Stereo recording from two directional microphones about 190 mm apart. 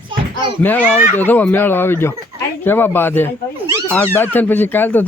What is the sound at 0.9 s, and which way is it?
Speech, 10° left (ahead or behind).